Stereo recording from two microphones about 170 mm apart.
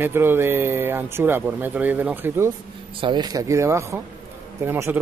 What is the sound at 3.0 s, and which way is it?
Speech, 25° right (ahead or behind).